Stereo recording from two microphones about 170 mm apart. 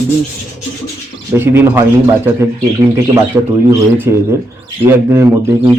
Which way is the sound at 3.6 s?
15° right (ahead or behind).